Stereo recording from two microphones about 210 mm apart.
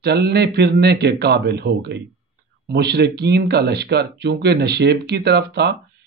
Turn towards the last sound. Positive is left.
turn(degrees=-50)  # may be behind; listen again after turning